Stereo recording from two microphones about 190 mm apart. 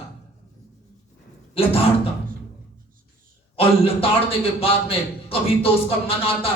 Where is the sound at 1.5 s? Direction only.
30° left (ahead or behind).